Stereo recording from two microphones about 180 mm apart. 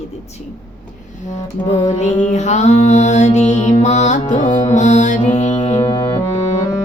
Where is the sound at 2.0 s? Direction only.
40° left (ahead or behind).